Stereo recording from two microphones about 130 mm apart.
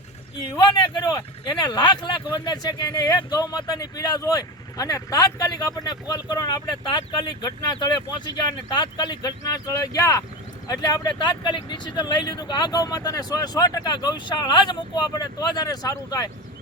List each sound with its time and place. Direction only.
0.4 s speech: 35° left (ahead or behind)